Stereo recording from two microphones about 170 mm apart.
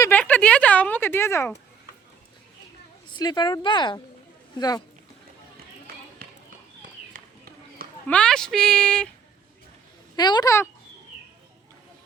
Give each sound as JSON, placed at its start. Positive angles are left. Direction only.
{"t": 0.0, "sound": "a sound", "side_deg": 10}
{"t": 3.2, "sound": "speech", "side_deg": 25}
{"t": 7.1, "sound": "run", "side_deg": -60}
{"t": 8.0, "sound": "speech", "side_deg": 5}
{"t": 10.2, "sound": "speech", "side_deg": 25}